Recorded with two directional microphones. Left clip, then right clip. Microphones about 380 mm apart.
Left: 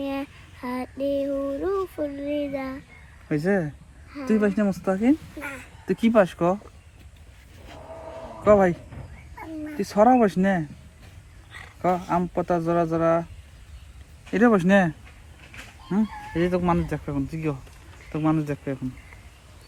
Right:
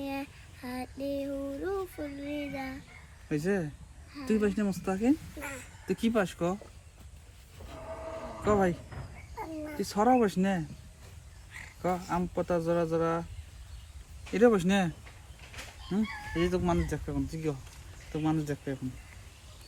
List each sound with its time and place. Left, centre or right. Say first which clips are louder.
0.0 s child singing: left 7 dB; centre
3.2 s speech: left 7 dB; centre
5.4 s a sound: left 6 dB; centre
5.9 s speech: left 10 dB; centre
8.4 s speech: left 10 dB; centre
9.8 s speech: left 8 dB; centre
14.3 s speech: left 6 dB; centre